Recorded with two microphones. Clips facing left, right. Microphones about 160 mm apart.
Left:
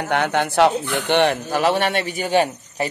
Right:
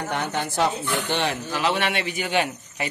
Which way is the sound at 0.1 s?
70° left (ahead or behind).